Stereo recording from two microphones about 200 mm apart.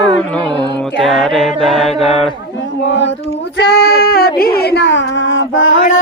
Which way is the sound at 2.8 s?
65° left (ahead or behind).